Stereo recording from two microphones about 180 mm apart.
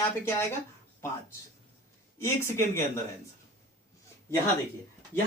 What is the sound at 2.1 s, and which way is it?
Speech, 15° left (ahead or behind).